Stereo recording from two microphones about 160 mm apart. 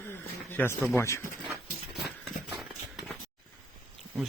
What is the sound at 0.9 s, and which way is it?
Speech, 15° left (ahead or behind).